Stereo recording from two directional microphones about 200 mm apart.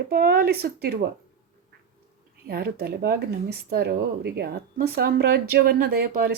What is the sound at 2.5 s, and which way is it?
Speech, 50° right (ahead or behind).